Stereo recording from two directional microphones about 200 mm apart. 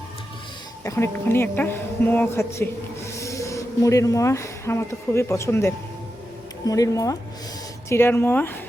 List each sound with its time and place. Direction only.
0.9 s a woman's voice: 10° left (ahead or behind)